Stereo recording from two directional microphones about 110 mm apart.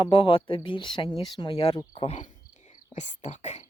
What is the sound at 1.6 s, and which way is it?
Speech, 65° left (ahead or behind).